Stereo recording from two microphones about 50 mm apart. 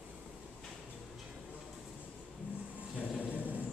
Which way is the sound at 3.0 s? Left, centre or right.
Right.